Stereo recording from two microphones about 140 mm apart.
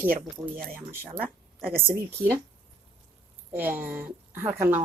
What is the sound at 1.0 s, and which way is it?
Speech, 90° right.